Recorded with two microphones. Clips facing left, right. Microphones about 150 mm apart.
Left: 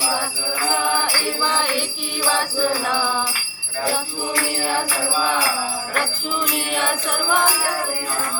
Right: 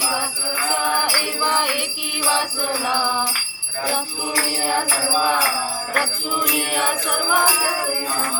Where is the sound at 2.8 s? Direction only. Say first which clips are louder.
Even; 15° right (ahead or behind).